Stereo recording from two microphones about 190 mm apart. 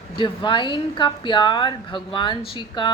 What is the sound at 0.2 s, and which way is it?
A woman's voice, 25° left (ahead or behind).